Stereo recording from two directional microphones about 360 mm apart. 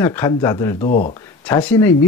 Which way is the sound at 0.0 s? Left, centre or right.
Centre.